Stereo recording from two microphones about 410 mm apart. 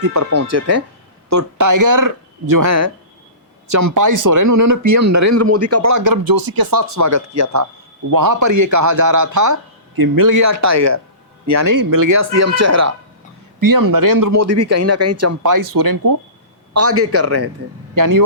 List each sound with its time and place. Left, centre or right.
0.0 s a man's voice: right
6.9 s a man's voice: right
13.6 s speech: right
16.7 s a man's voice: right
17.9 s speech: right